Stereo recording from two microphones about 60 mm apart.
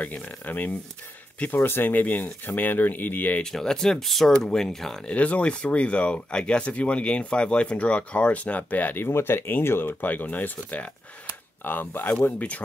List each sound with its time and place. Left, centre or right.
0.0 s speech: left
3.5 s speech: centre
5.0 s speech: left